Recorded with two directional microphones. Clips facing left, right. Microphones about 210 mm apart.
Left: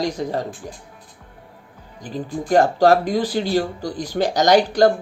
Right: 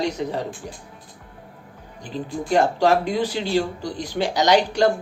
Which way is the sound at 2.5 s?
40° left (ahead or behind).